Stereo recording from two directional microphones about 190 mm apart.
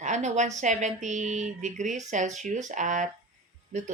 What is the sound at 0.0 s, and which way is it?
Speech, 40° right (ahead or behind).